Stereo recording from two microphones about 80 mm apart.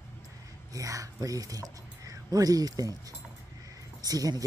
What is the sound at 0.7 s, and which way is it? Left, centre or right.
Speech, right.